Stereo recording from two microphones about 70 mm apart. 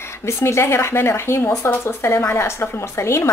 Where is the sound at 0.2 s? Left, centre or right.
Left.